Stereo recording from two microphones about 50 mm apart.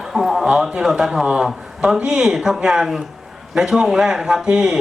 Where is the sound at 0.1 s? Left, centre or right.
Centre.